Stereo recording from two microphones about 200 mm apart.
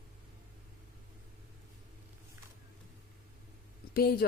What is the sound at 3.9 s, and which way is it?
Speech, 50° left (ahead or behind).